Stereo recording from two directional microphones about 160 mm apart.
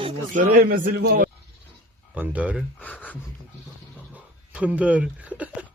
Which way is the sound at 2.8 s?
10° left (ahead or behind).